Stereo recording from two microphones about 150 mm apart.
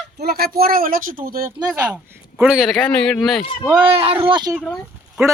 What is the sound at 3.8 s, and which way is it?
Speech, 40° right (ahead or behind).